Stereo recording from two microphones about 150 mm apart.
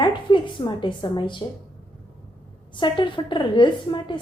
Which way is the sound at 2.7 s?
30° left (ahead or behind).